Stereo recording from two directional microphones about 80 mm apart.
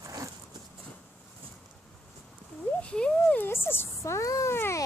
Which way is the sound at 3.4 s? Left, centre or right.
Left.